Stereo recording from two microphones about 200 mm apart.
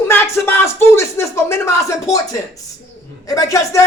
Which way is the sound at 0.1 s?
10° left (ahead or behind).